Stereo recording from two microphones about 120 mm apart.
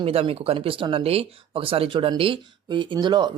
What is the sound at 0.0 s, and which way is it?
Speech, 55° right (ahead or behind).